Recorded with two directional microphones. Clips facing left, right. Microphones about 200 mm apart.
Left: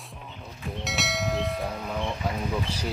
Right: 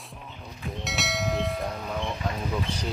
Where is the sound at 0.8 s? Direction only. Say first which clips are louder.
Even; centre (ahead or behind).